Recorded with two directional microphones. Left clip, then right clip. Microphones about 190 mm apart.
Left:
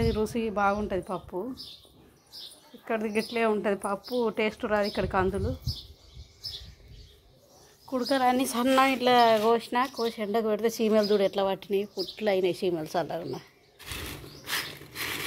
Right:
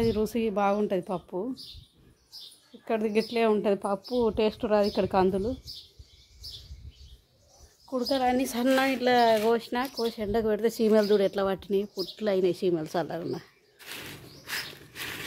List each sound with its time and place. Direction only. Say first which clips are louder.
0.0 s speech: right 1 dB; 25° right (ahead or behind)
2.8 s speech: right 2 dB; 30° right (ahead or behind)
7.9 s speech: left 1 dB; 5° right (ahead or behind); by 13.5 s 20° right (ahead or behind)
14.4 s a sound: left 3 dB; 20° left (ahead or behind)